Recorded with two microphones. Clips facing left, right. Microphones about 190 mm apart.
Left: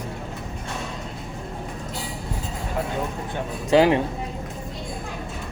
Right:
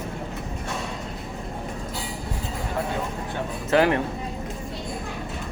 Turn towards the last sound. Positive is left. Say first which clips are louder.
# left 3 dB
turn(degrees=15)  # may be behind; listen again after turning